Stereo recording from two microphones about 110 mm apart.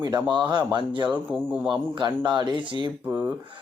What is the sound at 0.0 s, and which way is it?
Speech, 40° right (ahead or behind).